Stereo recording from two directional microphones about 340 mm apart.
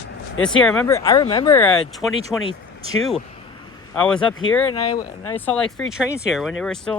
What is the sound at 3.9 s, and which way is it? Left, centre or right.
Speech, centre.